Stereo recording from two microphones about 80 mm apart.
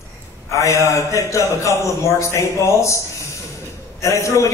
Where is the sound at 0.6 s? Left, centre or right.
Left.